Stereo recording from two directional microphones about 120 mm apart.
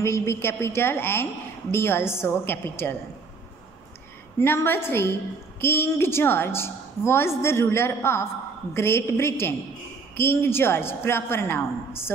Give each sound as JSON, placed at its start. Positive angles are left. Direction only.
{"t": 0.0, "sound": "a woman's voice", "side_deg": 25}
{"t": 4.4, "sound": "a woman's voice", "side_deg": 20}